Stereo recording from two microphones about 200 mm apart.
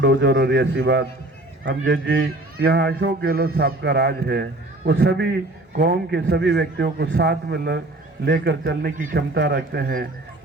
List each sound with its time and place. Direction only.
0.0 s a man's voice: 55° right (ahead or behind)
9.3 s speech: 60° right (ahead or behind)